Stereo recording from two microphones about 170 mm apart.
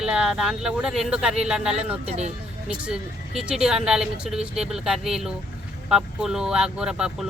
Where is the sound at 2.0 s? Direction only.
40° right (ahead or behind).